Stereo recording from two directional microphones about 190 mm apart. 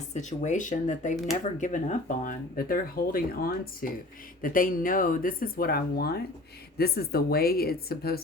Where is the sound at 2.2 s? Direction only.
50° left (ahead or behind).